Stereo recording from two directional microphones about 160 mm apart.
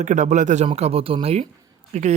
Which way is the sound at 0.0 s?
50° right (ahead or behind).